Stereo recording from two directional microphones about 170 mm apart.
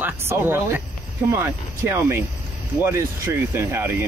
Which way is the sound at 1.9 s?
15° right (ahead or behind).